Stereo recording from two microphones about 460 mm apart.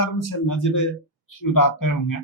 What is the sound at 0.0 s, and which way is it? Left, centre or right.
A man's voice, left.